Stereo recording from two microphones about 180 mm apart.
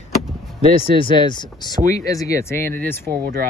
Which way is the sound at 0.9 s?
25° left (ahead or behind).